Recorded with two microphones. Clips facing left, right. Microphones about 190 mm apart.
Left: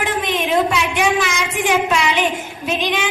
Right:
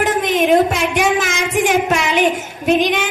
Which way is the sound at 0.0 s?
50° right (ahead or behind).